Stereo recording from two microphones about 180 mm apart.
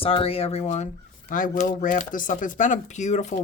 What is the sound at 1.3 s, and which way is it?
A woman's voice, 45° left (ahead or behind).